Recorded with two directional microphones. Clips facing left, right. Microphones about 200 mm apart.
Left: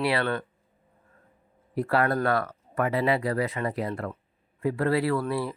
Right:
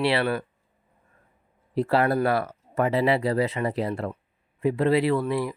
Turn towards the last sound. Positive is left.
turn(degrees=-15)  # may be behind; listen again after turning